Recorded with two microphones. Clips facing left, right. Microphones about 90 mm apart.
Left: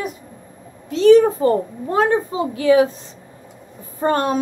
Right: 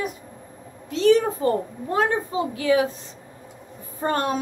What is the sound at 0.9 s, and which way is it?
A woman's voice, 35° left (ahead or behind).